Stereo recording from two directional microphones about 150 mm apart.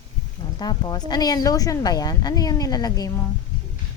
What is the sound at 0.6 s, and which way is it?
A woman's voice, 25° left (ahead or behind).